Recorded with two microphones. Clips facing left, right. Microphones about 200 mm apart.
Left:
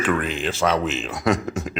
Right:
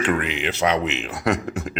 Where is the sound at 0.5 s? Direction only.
20° right (ahead or behind).